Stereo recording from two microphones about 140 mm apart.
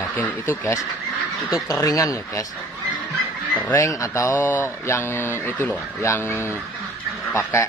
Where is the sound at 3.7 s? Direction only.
20° left (ahead or behind).